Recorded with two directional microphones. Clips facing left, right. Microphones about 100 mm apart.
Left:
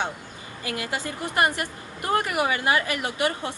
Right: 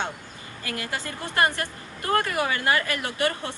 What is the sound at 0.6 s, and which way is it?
A woman's voice, 20° left (ahead or behind).